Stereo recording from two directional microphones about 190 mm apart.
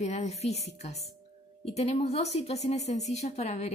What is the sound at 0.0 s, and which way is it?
A woman's voice, 35° left (ahead or behind).